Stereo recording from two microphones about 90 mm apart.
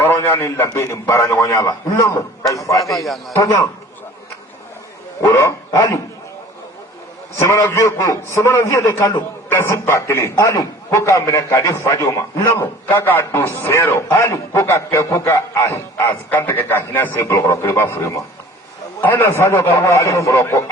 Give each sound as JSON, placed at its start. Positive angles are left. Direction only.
{"t": 0.0, "sound": "a man's voice", "side_deg": 25}
{"t": 2.9, "sound": "a man's voice", "side_deg": 0}
{"t": 3.3, "sound": "a man's voice", "side_deg": 40}
{"t": 5.2, "sound": "a man's voice", "side_deg": 35}
{"t": 7.3, "sound": "a man's voice", "side_deg": 35}
{"t": 12.5, "sound": "a man's voice", "side_deg": 25}